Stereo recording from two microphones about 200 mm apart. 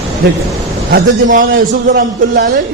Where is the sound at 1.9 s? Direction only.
55° right (ahead or behind).